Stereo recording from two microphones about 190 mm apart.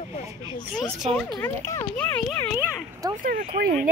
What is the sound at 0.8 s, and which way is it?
Speech, 5° left (ahead or behind).